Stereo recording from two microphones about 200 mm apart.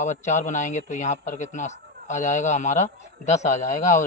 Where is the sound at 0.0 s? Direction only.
35° left (ahead or behind).